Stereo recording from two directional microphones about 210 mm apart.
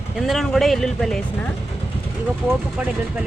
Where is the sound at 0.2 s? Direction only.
Centre (ahead or behind).